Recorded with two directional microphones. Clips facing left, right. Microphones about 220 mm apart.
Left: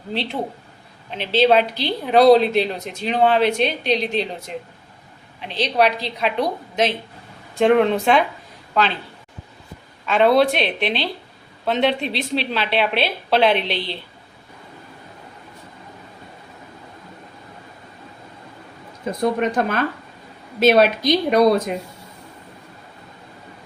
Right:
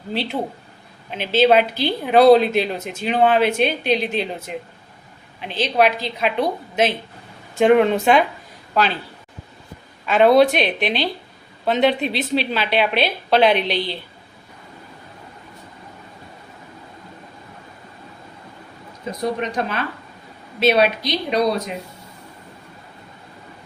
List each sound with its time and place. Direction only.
0.1 s speech: 5° right (ahead or behind)
10.1 s speech: centre (ahead or behind)
19.2 s a woman's voice: 50° left (ahead or behind)